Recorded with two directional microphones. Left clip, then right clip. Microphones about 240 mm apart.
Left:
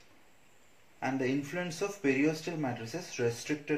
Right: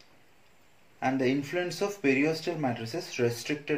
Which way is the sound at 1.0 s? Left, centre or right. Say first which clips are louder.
Right 5 dB; right.